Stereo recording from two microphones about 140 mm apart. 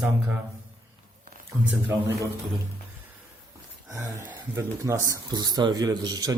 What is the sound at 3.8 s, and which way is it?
A man's voice, 20° right (ahead or behind).